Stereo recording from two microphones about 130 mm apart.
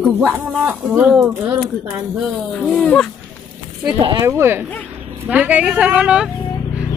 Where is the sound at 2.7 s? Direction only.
5° left (ahead or behind).